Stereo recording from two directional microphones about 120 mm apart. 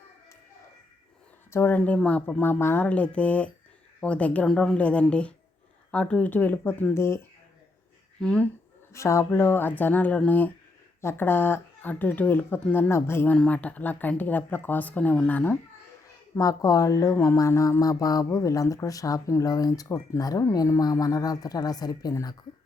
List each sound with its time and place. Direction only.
1.5 s speech: 20° left (ahead or behind)
8.2 s speech: 10° left (ahead or behind)
8.9 s speech: 25° left (ahead or behind)
13.3 s speech: 10° left (ahead or behind)
16.3 s speech: 30° left (ahead or behind)